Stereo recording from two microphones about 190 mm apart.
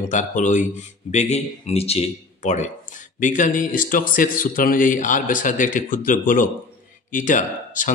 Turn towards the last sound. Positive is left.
turn(degrees=45)  # may be behind; listen again after turning